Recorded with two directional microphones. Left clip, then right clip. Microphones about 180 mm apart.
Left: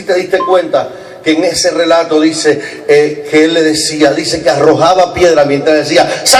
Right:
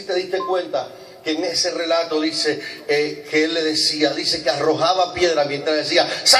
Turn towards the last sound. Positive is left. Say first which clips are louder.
# left 7 dB
turn(degrees=45)  # may be behind; listen again after turning